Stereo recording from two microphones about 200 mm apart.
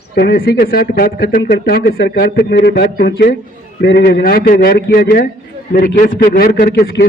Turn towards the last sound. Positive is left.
turn(degrees=50)  # may be behind; listen again after turning